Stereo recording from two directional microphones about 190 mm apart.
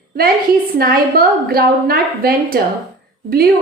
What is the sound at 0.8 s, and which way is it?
A woman's voice, 50° right (ahead or behind).